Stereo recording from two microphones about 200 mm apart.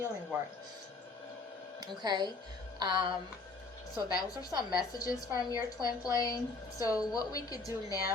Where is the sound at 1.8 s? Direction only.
20° right (ahead or behind).